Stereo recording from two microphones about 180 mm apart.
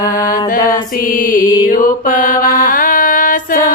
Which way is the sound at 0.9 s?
50° left (ahead or behind).